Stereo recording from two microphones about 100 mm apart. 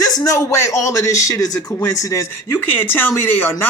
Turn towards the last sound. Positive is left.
turn(degrees=20)  # may be behind; listen again after turning